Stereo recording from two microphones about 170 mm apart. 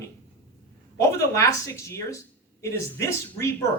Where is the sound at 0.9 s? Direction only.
20° left (ahead or behind).